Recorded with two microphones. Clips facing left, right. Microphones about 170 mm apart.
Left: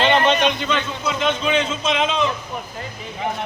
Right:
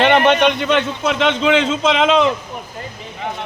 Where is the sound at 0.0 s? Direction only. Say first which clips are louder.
Right 4 dB; 65° right (ahead or behind); by 2.3 s 90° right.